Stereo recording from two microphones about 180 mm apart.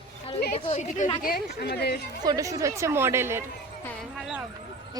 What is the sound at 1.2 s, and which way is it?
Speech, 60° left (ahead or behind).